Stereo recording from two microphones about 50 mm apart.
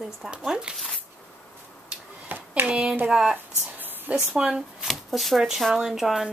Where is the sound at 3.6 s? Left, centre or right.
Right.